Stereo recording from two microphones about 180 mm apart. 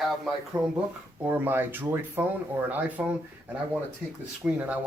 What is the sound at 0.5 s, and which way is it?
Speech, 20° right (ahead or behind).